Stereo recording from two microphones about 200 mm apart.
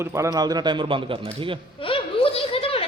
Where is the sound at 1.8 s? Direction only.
25° left (ahead or behind).